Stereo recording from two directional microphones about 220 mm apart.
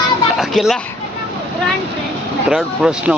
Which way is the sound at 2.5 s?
5° right (ahead or behind).